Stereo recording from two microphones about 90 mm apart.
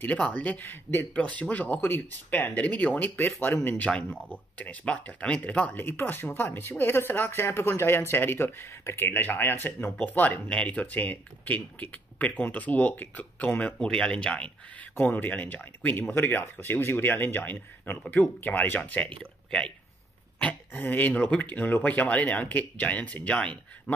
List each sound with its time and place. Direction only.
0.0 s speech: 15° left (ahead or behind)
5.9 s speech: 25° left (ahead or behind)
20.3 s speech: 15° left (ahead or behind)